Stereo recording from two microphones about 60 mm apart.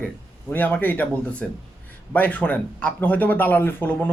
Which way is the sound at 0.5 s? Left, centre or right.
Left.